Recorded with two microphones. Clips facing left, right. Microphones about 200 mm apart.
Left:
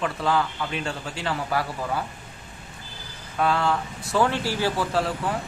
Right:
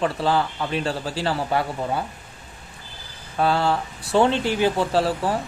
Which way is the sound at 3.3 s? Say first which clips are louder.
Right 2 dB; 30° right (ahead or behind).